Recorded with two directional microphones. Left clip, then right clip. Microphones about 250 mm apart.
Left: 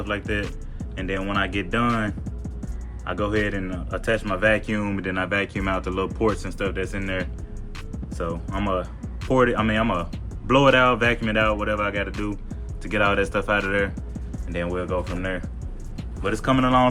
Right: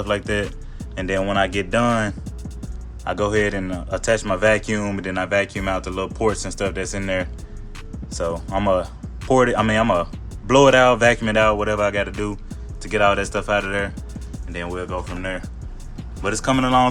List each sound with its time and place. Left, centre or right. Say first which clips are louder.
0.0 s speech: right 5 dB; centre
6.4 s speech: right 3 dB; centre
16.2 s speech: right 1 dB; centre